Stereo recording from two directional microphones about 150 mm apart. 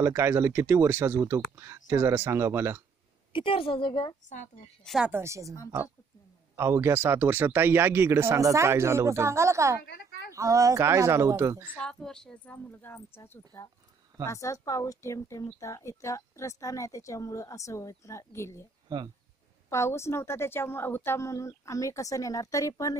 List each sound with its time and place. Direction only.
0.0 s speech: 15° right (ahead or behind)
3.3 s a woman's voice: 35° left (ahead or behind)
4.8 s a woman's voice: 5° right (ahead or behind)
5.1 s speech: 20° right (ahead or behind)
6.5 s speech: 15° right (ahead or behind)
9.8 s a sound: 90° left
10.3 s speech: 20° right (ahead or behind)
11.7 s a woman's voice: 5° left (ahead or behind)
18.9 s speech: 25° right (ahead or behind)
19.7 s speech: 20° left (ahead or behind)